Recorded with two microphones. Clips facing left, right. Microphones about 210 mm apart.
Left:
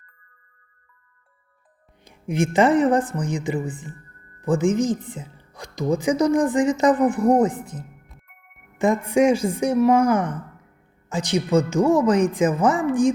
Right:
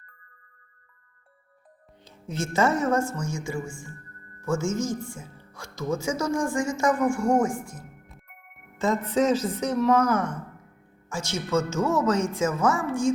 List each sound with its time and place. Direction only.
2.0 s a woman's voice: 15° left (ahead or behind)